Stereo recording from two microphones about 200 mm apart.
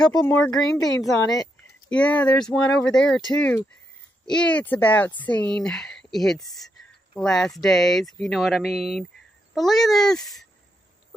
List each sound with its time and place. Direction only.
0.0 s speech: 20° left (ahead or behind)
0.6 s speech: 5° left (ahead or behind)